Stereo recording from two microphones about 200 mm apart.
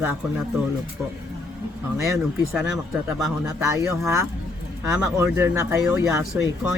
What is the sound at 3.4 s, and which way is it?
Speech, 15° right (ahead or behind).